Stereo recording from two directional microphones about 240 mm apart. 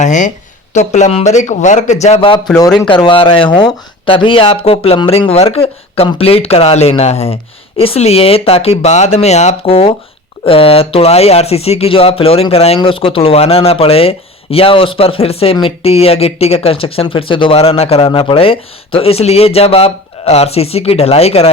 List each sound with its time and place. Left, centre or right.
0.0 s speech: left